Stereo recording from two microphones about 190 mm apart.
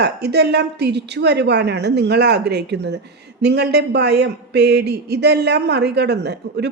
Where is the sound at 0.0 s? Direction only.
60° right (ahead or behind).